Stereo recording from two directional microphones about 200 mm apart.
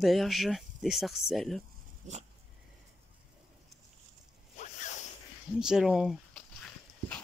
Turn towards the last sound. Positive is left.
turn(degrees=0)  # may be behind; listen again after turning